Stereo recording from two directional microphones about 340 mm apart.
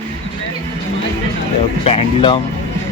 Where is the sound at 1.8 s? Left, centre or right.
Centre.